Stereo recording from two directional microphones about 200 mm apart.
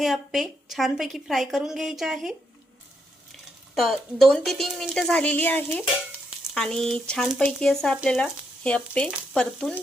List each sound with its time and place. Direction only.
0.0 s speech: centre (ahead or behind)
3.8 s speech: centre (ahead or behind)